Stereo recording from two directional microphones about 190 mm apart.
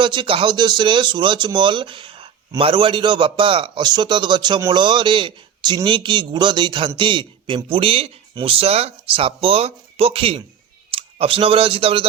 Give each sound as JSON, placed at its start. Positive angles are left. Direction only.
{"t": 0.0, "sound": "speech", "side_deg": -25}